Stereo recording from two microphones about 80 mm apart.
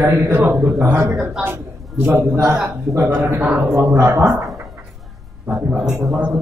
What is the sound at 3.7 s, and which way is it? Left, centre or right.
Speech, right.